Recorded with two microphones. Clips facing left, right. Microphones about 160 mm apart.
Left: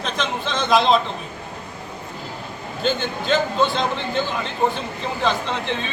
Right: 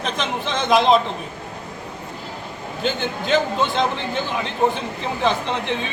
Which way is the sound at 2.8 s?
15° right (ahead or behind).